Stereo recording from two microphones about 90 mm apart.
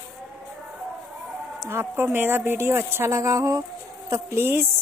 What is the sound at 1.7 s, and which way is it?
A woman's voice, 30° right (ahead or behind).